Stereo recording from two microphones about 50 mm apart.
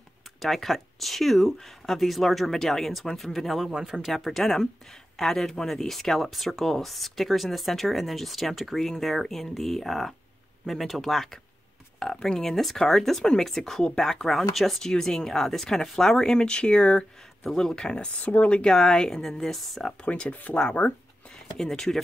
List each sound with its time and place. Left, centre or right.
0.4 s speech: centre
4.1 s speech: centre
12.0 s speech: centre
17.5 s speech: centre
18.2 s speech: left
18.6 s speech: centre
20.1 s speech: left
21.5 s speech: centre